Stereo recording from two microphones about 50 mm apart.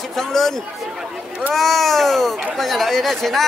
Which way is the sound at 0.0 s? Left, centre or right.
Centre.